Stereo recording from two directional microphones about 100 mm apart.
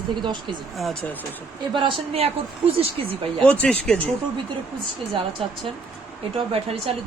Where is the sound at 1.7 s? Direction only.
55° right (ahead or behind).